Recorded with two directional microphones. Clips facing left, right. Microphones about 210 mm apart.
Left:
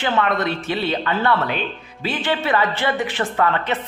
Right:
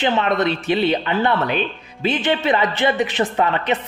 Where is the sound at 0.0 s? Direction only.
20° right (ahead or behind).